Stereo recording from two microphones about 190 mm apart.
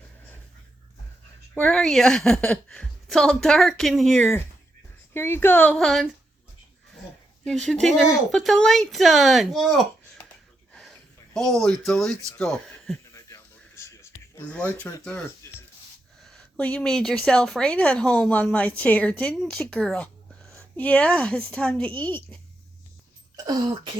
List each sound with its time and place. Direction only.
1.5 s a woman's voice: 5° left (ahead or behind)
7.4 s a woman's voice: centre (ahead or behind)
10.7 s a sound: centre (ahead or behind)
11.5 s a woman's voice: centre (ahead or behind)
13.1 s a sound: 15° left (ahead or behind)
16.2 s a woman's voice: 5° left (ahead or behind)
23.5 s speech: 20° right (ahead or behind)